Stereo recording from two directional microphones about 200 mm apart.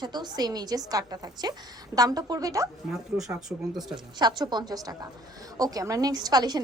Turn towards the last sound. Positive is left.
turn(degrees=-20)  # may be behind; listen again after turning